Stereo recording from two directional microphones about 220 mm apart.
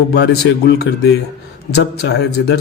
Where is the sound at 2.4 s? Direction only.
55° left (ahead or behind).